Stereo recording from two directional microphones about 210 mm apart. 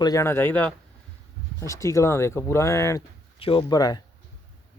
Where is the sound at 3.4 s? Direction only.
25° left (ahead or behind).